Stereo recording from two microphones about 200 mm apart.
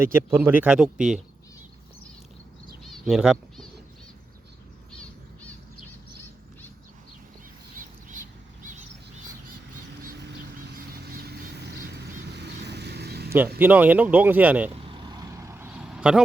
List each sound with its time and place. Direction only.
0.0 s speech: 10° right (ahead or behind)
2.8 s bird: centre (ahead or behind)
4.9 s bird: 5° left (ahead or behind)
7.8 s a sound: 40° right (ahead or behind)
10.0 s a sound: 50° right (ahead or behind)
11.0 s vehicle: 50° right (ahead or behind)
13.6 s speech: 10° right (ahead or behind)
14.8 s vehicle: 25° right (ahead or behind); by 16.2 s 5° right (ahead or behind)